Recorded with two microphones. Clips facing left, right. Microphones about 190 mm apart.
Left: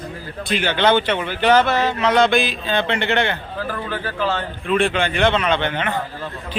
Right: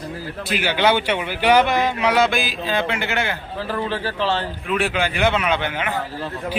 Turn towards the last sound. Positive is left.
turn(degrees=-10)  # may be behind; listen again after turning